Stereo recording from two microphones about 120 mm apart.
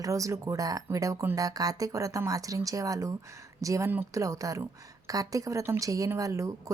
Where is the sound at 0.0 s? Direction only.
25° right (ahead or behind).